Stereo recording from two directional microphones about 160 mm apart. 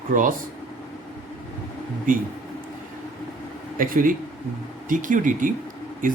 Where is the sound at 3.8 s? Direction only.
60° right (ahead or behind).